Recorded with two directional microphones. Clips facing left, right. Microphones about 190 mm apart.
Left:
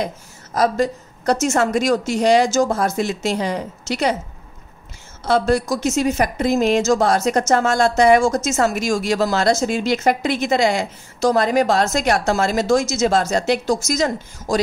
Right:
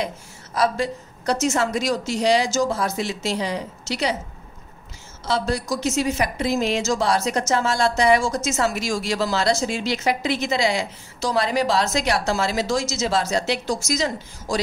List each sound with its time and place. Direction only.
0.6 s a woman's voice: 45° left (ahead or behind)
5.2 s a woman's voice: 55° left (ahead or behind)